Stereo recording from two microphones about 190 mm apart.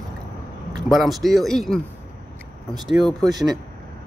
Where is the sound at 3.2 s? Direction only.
20° right (ahead or behind).